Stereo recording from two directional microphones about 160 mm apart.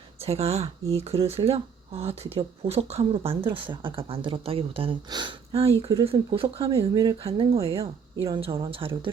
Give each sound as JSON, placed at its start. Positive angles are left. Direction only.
{"t": 0.3, "sound": "speech", "side_deg": -40}